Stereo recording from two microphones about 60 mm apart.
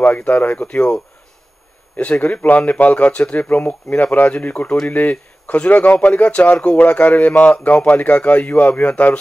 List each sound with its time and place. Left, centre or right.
0.0 s speech: left